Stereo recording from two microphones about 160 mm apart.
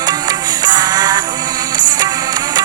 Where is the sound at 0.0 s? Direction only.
25° right (ahead or behind).